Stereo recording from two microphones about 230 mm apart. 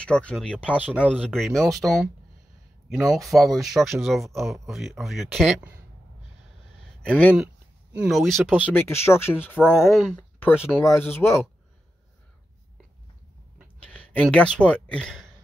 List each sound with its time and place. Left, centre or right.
0.0 s speech: centre
1.8 s speech: centre
3.1 s speech: centre
7.0 s speech: centre
9.6 s speech: centre
10.8 s speech: centre
13.8 s speech: centre